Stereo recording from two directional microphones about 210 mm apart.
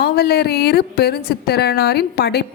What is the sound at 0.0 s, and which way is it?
Speech, 50° left (ahead or behind).